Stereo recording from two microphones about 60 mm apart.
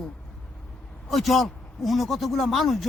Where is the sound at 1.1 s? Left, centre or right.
Centre.